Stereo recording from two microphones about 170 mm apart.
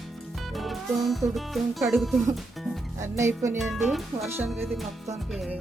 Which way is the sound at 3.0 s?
15° right (ahead or behind).